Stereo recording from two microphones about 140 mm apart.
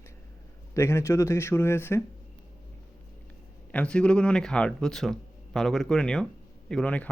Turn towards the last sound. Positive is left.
turn(degrees=10)  # may be behind; listen again after turning